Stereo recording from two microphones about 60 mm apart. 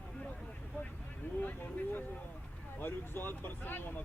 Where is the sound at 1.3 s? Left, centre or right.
Left.